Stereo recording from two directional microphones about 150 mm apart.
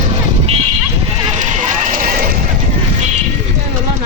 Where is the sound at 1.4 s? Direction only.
55° right (ahead or behind).